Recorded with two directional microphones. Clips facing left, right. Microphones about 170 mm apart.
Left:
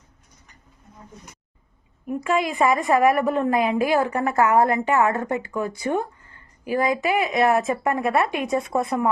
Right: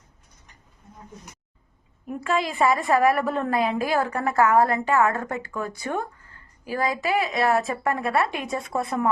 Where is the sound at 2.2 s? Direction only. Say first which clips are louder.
Left 1 dB; 15° left (ahead or behind).